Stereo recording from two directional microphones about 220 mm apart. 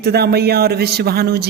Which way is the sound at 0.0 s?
45° right (ahead or behind).